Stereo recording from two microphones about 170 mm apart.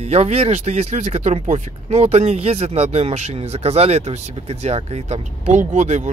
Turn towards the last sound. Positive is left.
turn(degrees=-45)  # may be behind; listen again after turning